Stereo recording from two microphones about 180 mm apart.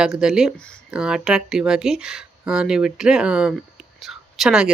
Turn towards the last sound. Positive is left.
turn(degrees=0)  # may be behind; listen again after turning